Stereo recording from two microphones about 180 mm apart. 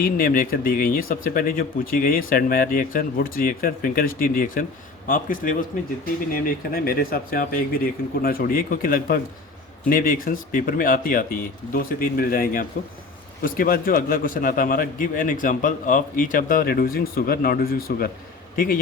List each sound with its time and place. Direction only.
0.0 s a man's voice: 50° left (ahead or behind)